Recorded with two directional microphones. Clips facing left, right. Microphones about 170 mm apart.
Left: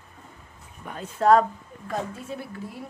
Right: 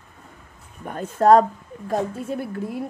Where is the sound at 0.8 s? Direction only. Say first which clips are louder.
Right 4 dB; 50° right (ahead or behind).